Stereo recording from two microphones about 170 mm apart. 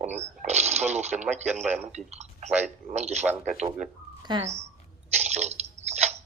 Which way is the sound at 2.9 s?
40° right (ahead or behind).